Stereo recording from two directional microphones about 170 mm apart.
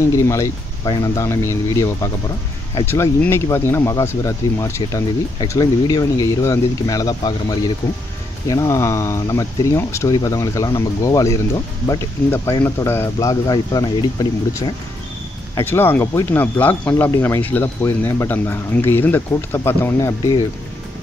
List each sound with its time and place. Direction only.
0.0 s speech: 15° left (ahead or behind)
2.9 s speech: 15° left (ahead or behind)